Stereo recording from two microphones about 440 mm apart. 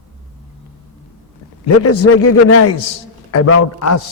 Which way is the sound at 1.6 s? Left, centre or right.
Left.